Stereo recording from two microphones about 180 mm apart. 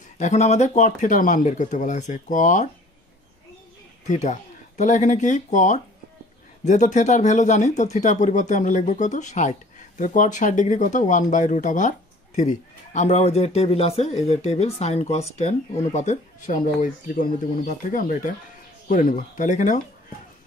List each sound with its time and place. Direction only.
0.2 s speech: 40° left (ahead or behind)
4.1 s speech: 40° left (ahead or behind)